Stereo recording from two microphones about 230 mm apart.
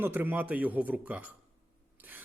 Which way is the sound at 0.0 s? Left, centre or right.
Centre.